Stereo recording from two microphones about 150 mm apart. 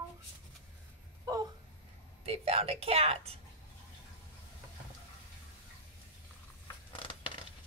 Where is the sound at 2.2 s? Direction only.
40° right (ahead or behind).